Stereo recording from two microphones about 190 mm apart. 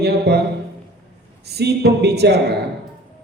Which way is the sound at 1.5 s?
60° right (ahead or behind).